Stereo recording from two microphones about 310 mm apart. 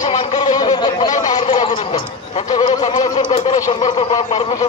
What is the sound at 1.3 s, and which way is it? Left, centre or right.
A man's voice, centre.